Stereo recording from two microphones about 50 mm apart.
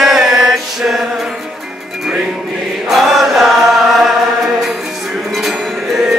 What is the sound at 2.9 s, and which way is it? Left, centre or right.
Chant, centre.